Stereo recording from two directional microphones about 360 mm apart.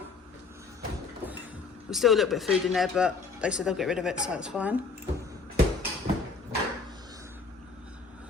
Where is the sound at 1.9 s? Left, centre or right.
Centre.